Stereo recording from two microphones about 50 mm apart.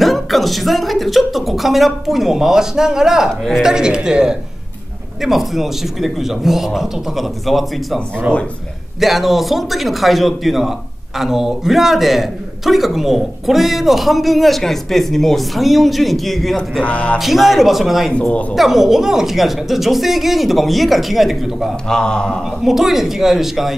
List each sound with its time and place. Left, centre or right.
0.0 s a man's voice: centre
9.0 s a man's voice: centre
16.8 s speech: left
17.2 s a man's voice: centre
21.8 s speech: centre
22.4 s a man's voice: centre